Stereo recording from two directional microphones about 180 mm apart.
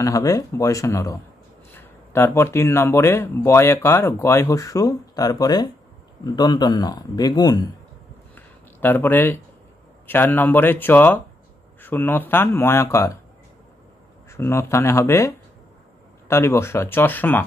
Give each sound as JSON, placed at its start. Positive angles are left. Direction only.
{"t": 0.0, "sound": "speech", "side_deg": 20}
{"t": 8.4, "sound": "a sound", "side_deg": 10}
{"t": 10.0, "sound": "speech", "side_deg": 10}
{"t": 14.3, "sound": "speech", "side_deg": 15}